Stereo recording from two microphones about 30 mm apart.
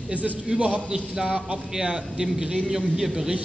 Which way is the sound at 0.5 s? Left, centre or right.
Right.